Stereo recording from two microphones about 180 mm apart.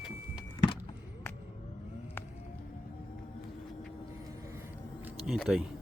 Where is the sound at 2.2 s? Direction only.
15° left (ahead or behind).